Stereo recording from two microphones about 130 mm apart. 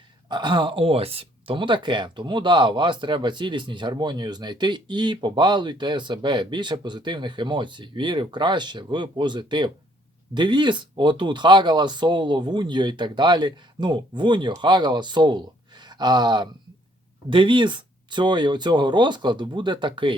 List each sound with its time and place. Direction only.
0.3 s speech: 35° right (ahead or behind)